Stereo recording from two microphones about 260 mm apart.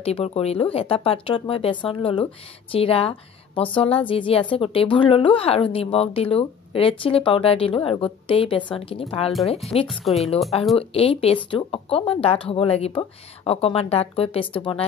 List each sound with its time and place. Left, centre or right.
0.0 s speech: left